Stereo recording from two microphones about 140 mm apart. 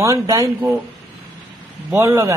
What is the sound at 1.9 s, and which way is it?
Speech, 20° right (ahead or behind).